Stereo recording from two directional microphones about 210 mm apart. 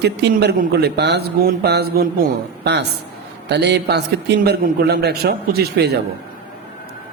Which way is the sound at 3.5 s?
55° right (ahead or behind).